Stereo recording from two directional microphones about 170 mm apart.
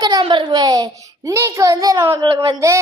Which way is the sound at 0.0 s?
25° right (ahead or behind).